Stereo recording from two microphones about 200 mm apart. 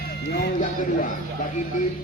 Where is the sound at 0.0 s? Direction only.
55° left (ahead or behind).